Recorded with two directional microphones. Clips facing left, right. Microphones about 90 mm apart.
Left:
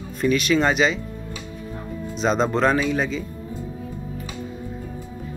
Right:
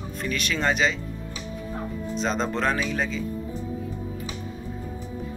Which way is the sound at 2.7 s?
15° left (ahead or behind).